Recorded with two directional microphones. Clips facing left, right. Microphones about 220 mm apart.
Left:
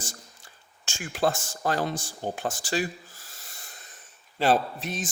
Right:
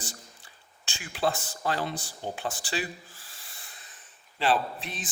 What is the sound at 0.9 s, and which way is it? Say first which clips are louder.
A man's voice: left 3 dB; 45° left (ahead or behind).